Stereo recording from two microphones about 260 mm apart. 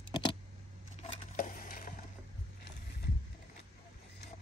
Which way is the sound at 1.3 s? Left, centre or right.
Left.